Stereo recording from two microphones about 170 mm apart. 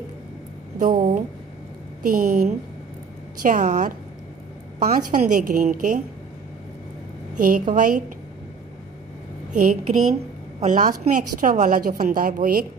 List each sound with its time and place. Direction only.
0.7 s a woman's voice: 55° right (ahead or behind)
7.3 s a woman's voice: 55° right (ahead or behind)
9.5 s a woman's voice: 50° right (ahead or behind)